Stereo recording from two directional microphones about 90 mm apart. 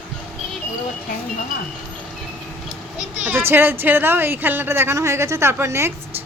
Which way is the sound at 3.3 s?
25° right (ahead or behind).